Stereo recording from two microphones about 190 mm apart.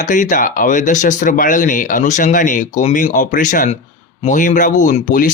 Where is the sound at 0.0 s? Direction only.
45° left (ahead or behind).